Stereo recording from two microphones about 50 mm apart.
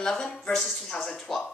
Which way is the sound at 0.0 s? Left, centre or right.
Centre.